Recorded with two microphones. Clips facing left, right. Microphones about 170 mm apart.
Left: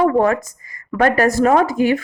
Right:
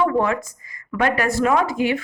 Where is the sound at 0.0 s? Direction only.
45° left (ahead or behind).